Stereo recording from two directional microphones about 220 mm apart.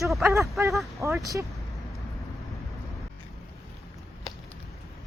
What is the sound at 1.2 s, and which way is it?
Speech, 15° right (ahead or behind).